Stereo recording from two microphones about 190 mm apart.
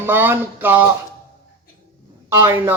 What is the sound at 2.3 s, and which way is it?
Speech, 10° right (ahead or behind).